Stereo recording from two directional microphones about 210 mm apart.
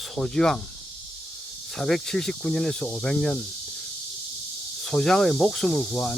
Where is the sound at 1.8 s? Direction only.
Centre (ahead or behind).